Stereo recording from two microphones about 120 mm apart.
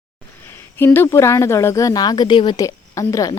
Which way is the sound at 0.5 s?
20° left (ahead or behind).